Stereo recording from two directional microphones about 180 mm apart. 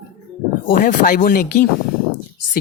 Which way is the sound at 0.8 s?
50° left (ahead or behind).